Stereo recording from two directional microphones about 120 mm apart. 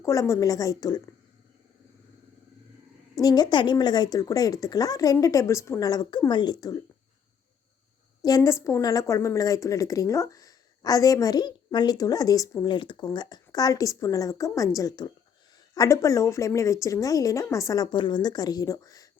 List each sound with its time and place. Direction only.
0.0 s a woman's voice: 25° left (ahead or behind)
3.2 s speech: 35° left (ahead or behind)
8.2 s a woman's voice: 30° left (ahead or behind)
17.9 s speech: 40° left (ahead or behind)